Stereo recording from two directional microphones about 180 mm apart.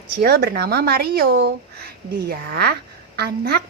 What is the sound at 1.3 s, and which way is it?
Speech, 85° right.